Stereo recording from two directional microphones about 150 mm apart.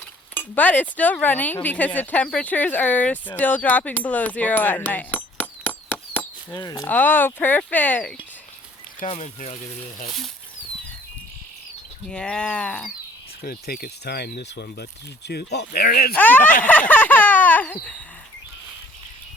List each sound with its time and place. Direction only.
0.3 s speech: 10° left (ahead or behind)
3.3 s a sound: 10° left (ahead or behind)
6.5 s speech: 25° left (ahead or behind)
6.8 s speech: 10° left (ahead or behind)
9.0 s speech: 45° left (ahead or behind)
12.0 s speech: 5° left (ahead or behind)
13.4 s speech: 90° left
16.1 s speech: 10° left (ahead or behind)
16.4 s a sound: 60° left (ahead or behind)
16.9 s baby laughter: 10° left (ahead or behind)